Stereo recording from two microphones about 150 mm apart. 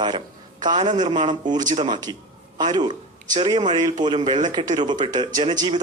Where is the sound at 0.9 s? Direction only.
30° right (ahead or behind).